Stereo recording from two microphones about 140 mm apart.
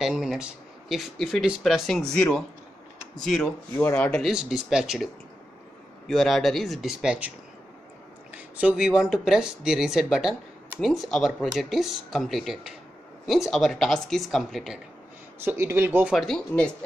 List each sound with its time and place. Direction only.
0.0 s speech: centre (ahead or behind)
4.2 s speech: 5° right (ahead or behind)
6.0 s speech: centre (ahead or behind)
15.4 s speech: 20° right (ahead or behind)
16.1 s speech: 5° left (ahead or behind)